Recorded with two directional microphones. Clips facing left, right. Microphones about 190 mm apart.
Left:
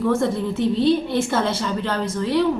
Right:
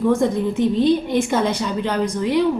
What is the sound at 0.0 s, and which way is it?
A woman's voice, 15° right (ahead or behind).